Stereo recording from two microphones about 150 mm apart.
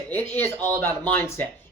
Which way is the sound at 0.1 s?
15° left (ahead or behind).